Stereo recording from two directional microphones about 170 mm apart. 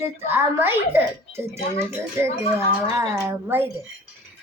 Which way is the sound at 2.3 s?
35° left (ahead or behind).